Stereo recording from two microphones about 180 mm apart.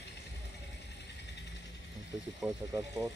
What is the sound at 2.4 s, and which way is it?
Speech, 5° right (ahead or behind).